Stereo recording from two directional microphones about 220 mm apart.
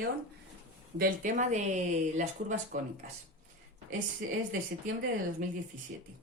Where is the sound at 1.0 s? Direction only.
35° right (ahead or behind).